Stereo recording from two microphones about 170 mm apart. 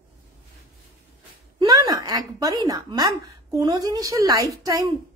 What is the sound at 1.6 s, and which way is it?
A woman's voice, 25° right (ahead or behind).